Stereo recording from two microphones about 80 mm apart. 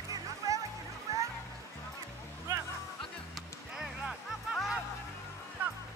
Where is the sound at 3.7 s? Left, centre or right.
Centre.